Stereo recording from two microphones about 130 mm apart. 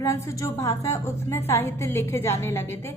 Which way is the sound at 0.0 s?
20° left (ahead or behind).